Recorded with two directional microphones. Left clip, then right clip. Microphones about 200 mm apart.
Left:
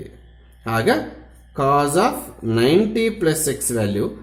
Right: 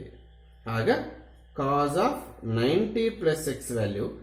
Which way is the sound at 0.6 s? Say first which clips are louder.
Left 7 dB; 50° left (ahead or behind).